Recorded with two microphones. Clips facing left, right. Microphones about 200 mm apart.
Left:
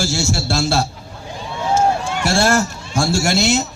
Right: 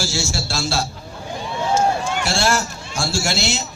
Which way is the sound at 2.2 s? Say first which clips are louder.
Left 7 dB; 55° left (ahead or behind).